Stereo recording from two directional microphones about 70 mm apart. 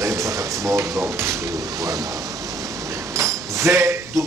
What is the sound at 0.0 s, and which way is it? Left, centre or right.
Drawer open or close, right.